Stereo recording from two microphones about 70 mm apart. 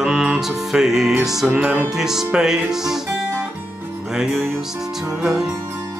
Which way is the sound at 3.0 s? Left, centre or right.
Right.